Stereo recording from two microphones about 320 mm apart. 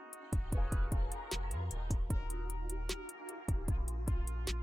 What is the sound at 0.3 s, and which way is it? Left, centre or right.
Music, centre.